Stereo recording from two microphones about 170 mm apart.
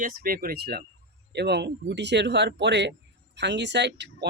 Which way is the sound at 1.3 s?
80° right.